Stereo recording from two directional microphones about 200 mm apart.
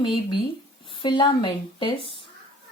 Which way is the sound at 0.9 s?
25° left (ahead or behind).